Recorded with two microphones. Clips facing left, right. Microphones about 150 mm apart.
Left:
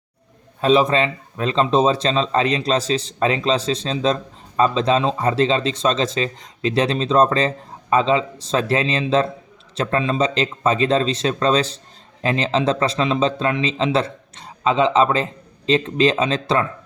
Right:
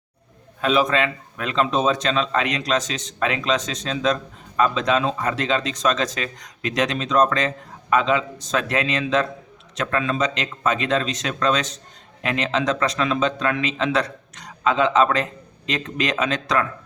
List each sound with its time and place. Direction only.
0.6 s speech: 30° left (ahead or behind)